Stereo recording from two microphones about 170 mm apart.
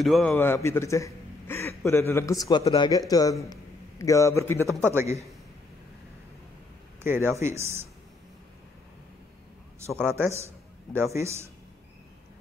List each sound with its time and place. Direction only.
0.0 s a man's voice: centre (ahead or behind)
0.4 s a man's voice: 15° left (ahead or behind)
4.7 s speech: 15° right (ahead or behind)
7.0 s speech: 15° right (ahead or behind)
9.8 s speech: 15° right (ahead or behind)